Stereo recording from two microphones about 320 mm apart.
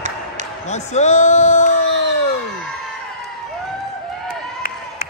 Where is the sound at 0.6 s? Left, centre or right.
Left.